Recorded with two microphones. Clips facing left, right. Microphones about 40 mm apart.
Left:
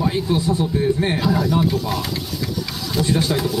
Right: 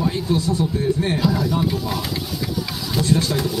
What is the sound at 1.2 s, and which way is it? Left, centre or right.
Speech, centre.